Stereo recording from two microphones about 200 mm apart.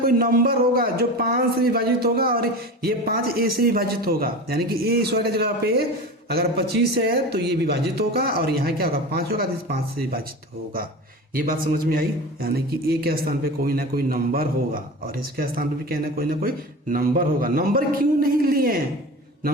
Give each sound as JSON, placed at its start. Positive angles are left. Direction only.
{"t": 0.0, "sound": "a man's voice", "side_deg": -45}
{"t": 11.3, "sound": "a man's voice", "side_deg": -45}